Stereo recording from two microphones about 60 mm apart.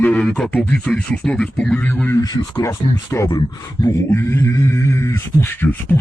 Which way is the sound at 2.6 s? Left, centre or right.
Left.